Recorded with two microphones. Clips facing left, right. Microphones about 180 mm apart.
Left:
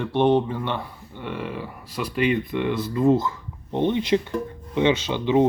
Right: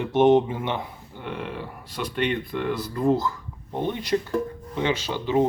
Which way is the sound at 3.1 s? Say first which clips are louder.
Left 2 dB; 25° left (ahead or behind).